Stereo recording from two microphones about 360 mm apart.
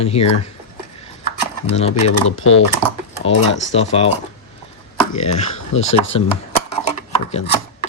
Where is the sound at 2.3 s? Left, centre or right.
Left.